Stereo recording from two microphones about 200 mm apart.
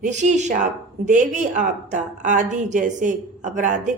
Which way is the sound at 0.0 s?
35° right (ahead or behind).